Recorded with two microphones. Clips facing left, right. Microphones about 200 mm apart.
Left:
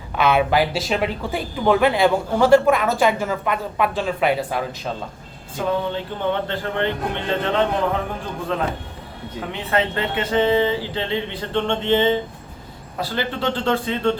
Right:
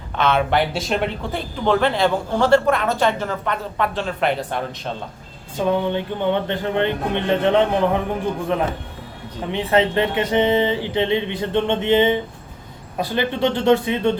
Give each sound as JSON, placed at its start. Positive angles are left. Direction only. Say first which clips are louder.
{"t": 0.2, "sound": "speech", "louder": "left 1 dB", "side_deg": 10}
{"t": 5.6, "sound": "a man's voice", "louder": "right 3 dB", "side_deg": -20}